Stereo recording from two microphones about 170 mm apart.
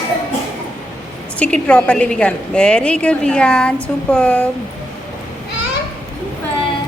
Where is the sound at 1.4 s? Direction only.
5° left (ahead or behind).